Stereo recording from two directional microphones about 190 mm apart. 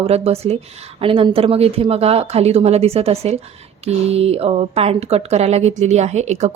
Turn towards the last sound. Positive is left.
turn(degrees=-35)  # may be behind; listen again after turning